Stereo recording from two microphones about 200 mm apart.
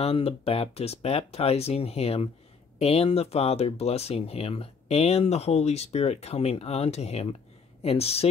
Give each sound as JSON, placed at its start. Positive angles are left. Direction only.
{"t": 0.0, "sound": "speech", "side_deg": 30}